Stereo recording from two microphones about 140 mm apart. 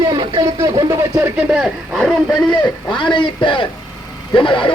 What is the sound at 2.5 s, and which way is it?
Speech, 30° left (ahead or behind).